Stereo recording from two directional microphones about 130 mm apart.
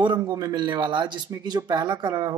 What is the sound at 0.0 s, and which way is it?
A man's voice, 30° right (ahead or behind).